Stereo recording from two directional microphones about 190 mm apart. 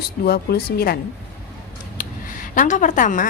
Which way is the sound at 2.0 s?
45° left (ahead or behind).